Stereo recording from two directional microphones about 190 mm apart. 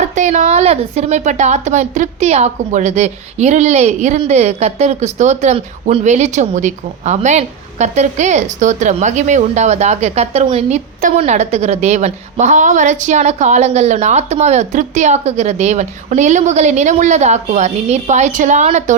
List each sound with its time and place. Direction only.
0.1 s speech: 40° right (ahead or behind)